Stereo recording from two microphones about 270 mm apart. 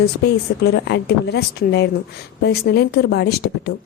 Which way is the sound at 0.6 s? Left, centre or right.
Left.